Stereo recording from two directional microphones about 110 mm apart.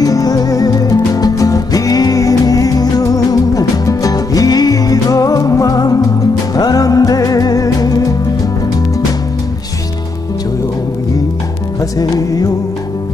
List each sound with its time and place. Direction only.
0.0 s music: 35° left (ahead or behind)
12.0 s music: 35° left (ahead or behind)